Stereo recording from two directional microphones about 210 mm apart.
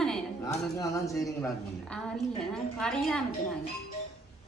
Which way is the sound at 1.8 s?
5° left (ahead or behind).